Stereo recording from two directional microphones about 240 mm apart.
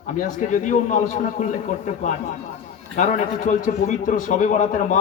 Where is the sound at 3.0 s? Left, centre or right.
Left.